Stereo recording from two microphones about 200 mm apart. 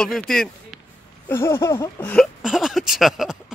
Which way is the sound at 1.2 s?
15° left (ahead or behind).